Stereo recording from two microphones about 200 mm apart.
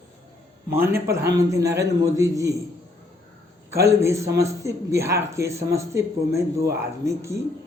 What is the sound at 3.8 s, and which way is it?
A man's voice, 15° right (ahead or behind).